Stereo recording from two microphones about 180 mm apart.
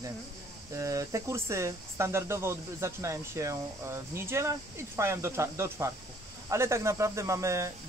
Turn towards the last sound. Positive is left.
turn(degrees=-15)  # may be behind; listen again after turning